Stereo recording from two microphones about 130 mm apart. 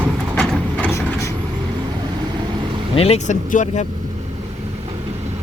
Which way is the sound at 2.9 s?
50° left (ahead or behind).